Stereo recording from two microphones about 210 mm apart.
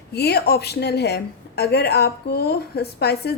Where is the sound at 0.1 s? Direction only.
50° left (ahead or behind).